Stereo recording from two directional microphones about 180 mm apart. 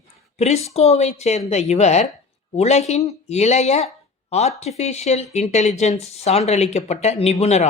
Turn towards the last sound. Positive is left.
turn(degrees=35)  # may be behind; listen again after turning